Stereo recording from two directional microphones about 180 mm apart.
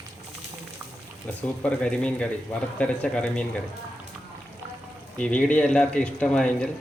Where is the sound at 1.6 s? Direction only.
5° left (ahead or behind).